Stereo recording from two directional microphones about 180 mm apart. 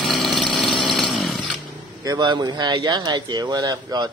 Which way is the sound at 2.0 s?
20° right (ahead or behind).